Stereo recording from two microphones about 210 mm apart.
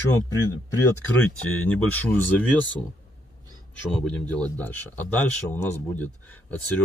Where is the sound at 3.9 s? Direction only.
5° left (ahead or behind).